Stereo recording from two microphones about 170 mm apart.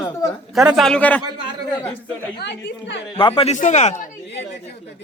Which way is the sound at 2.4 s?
90° left.